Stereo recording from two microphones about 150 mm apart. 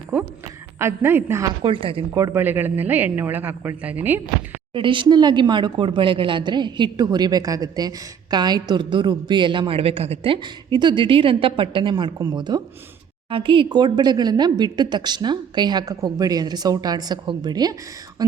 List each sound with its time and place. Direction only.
0.1 s speech: 15° right (ahead or behind)
1.6 s speech: 35° right (ahead or behind)
2.1 s speech: 20° right (ahead or behind)
4.7 s a woman's voice: 35° right (ahead or behind)